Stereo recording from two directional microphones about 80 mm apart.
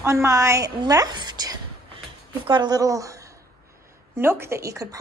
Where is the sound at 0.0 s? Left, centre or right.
Right.